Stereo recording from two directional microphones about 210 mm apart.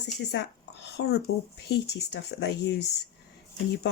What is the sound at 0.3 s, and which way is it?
Speech, 55° left (ahead or behind).